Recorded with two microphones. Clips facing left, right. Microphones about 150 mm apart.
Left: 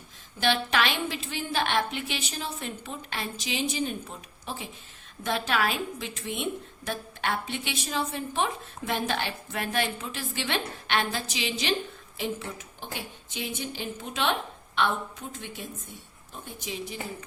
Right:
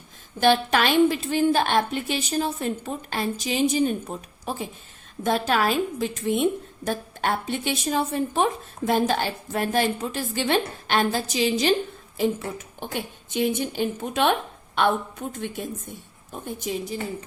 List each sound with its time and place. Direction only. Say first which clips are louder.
0.3 s a woman's voice: right 6 dB; 45° right (ahead or behind)
16.7 s a woman's voice: right 8 dB; 45° right (ahead or behind)